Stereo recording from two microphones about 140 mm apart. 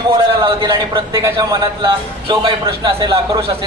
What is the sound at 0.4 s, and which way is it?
Speech, 35° right (ahead or behind).